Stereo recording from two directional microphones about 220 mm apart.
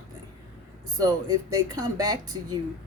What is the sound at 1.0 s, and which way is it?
Speech, 15° right (ahead or behind).